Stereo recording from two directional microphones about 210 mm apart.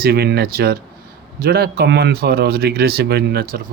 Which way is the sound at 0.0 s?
50° right (ahead or behind).